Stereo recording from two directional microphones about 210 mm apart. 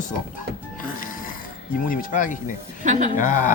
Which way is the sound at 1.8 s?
40° left (ahead or behind).